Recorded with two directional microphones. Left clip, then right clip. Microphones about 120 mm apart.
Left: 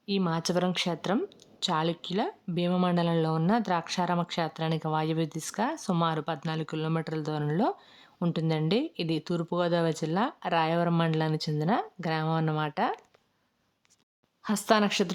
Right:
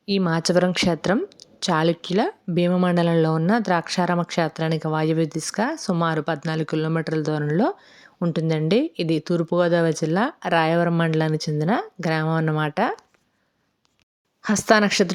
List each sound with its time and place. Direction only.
0.3 s a woman's voice: 30° right (ahead or behind)
14.4 s speech: 30° right (ahead or behind)